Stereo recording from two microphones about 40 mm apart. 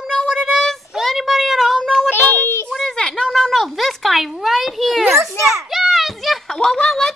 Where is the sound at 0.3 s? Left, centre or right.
Centre.